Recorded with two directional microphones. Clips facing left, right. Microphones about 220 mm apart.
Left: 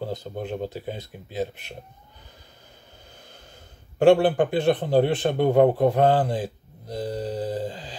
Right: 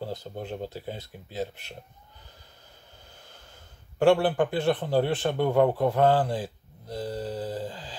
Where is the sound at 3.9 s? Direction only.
20° left (ahead or behind).